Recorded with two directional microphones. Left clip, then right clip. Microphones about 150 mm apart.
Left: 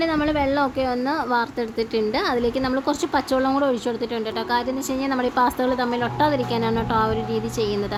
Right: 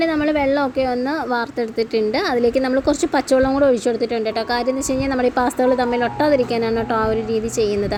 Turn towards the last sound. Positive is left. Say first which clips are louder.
# right 5 dB
turn(degrees=-10)  # may be behind; listen again after turning